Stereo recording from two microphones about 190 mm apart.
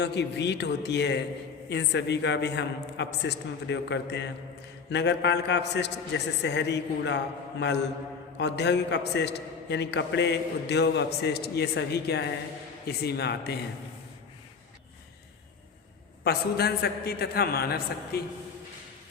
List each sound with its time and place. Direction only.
0.0 s a man's voice: 65° left (ahead or behind)
16.2 s a man's voice: 55° left (ahead or behind)